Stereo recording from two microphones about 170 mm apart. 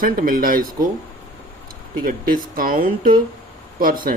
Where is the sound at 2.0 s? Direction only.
55° right (ahead or behind).